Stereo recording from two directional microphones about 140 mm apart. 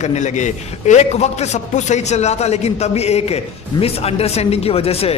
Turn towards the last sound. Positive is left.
turn(degrees=45)  # may be behind; listen again after turning